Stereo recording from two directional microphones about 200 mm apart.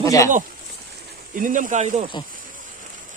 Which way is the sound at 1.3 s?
40° right (ahead or behind).